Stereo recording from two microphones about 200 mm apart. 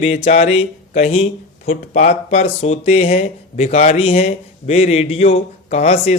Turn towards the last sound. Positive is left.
turn(degrees=30)  # may be behind; listen again after turning